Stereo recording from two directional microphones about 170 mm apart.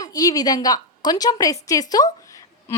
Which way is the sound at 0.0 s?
20° left (ahead or behind).